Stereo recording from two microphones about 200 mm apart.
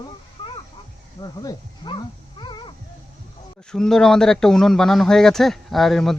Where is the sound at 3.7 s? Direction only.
5° left (ahead or behind).